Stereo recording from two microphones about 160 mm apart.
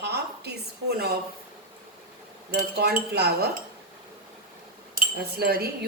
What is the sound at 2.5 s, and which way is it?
Speech, 85° right.